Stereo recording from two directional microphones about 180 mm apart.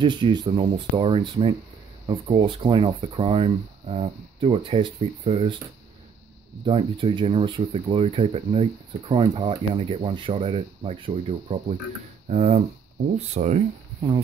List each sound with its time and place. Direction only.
0.0 s speech: 25° right (ahead or behind)
6.6 s speech: 30° right (ahead or behind)